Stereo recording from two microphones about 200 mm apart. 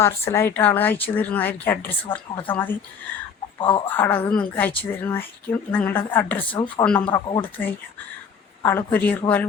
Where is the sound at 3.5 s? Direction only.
25° left (ahead or behind).